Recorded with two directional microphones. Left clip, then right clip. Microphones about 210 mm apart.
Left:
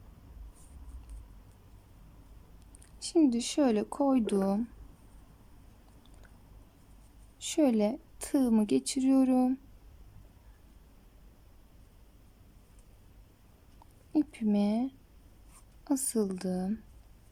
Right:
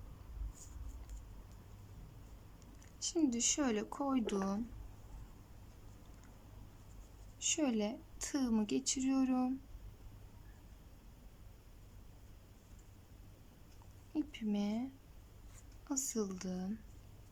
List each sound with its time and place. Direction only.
3.0 s a woman's voice: 20° left (ahead or behind)
7.3 s a woman's voice: 25° left (ahead or behind)
14.1 s a sound: 20° left (ahead or behind)
15.8 s a woman's voice: 25° left (ahead or behind)